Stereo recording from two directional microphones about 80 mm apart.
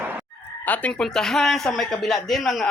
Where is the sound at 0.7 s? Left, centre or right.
Centre.